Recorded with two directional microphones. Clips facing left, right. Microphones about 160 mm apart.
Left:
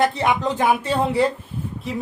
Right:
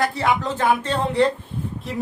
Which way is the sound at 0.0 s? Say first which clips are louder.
Left 2 dB; 20° left (ahead or behind).